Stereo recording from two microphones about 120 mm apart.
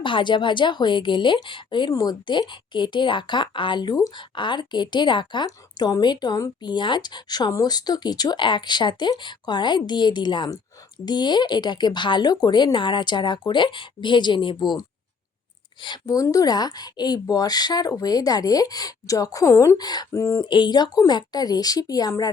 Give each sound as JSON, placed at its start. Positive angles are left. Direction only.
{"t": 0.0, "sound": "a woman's voice", "side_deg": 40}
{"t": 20.4, "sound": "a woman's voice", "side_deg": 40}